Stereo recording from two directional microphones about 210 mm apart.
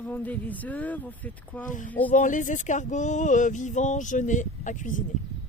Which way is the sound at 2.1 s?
40° left (ahead or behind).